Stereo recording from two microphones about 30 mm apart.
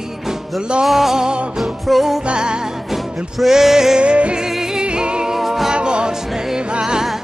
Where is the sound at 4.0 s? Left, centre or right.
Right.